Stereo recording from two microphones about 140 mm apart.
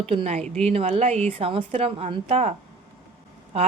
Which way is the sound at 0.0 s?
45° right (ahead or behind).